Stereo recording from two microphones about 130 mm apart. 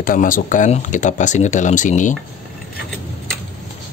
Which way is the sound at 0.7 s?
70° left (ahead or behind).